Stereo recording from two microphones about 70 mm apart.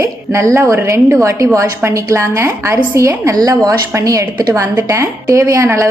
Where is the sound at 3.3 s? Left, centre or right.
Right.